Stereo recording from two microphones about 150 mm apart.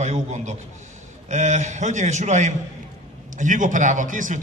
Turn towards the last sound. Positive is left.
turn(degrees=-60)  # may be behind; listen again after turning